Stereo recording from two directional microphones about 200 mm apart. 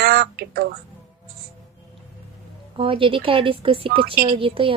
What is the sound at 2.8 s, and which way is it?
Speech, 25° right (ahead or behind).